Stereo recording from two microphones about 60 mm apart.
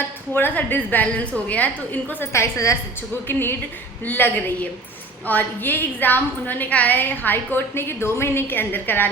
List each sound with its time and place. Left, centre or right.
0.3 s a woman's voice: left
2.3 s a woman's voice: left
3.2 s a woman's voice: left